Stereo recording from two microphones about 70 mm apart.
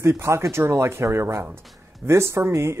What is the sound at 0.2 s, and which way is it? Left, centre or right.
Speech, right.